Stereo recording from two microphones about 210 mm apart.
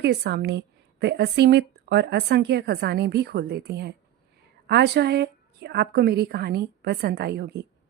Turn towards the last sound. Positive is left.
turn(degrees=-50)  # may be behind; listen again after turning